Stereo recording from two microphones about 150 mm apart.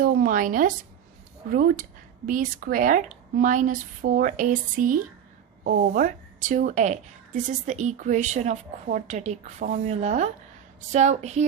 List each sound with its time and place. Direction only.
0.0 s a woman's voice: 65° right (ahead or behind)